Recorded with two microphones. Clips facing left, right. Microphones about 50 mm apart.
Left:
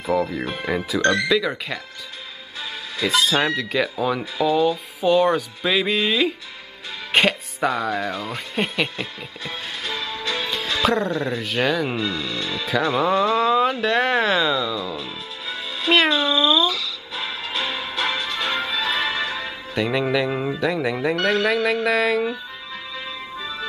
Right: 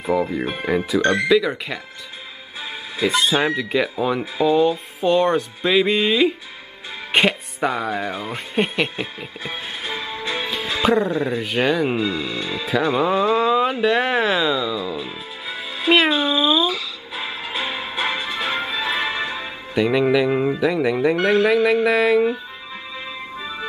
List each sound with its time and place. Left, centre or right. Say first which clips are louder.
0.7 s speech: right 4 dB; centre
1.0 s speech: right 1 dB; right
1.3 s speech: right 3 dB; centre
3.0 s speech: right 1 dB; centre
5.0 s speech: even; centre
8.9 s music: right 2 dB; right
11.1 s speech: right 2 dB; centre
12.0 s speech: right 2 dB; right
12.6 s a sound: right 1 dB; centre
19.7 s speech: right 4 dB; centre
21.2 s speech: right 3 dB; centre
23.3 s music: even; centre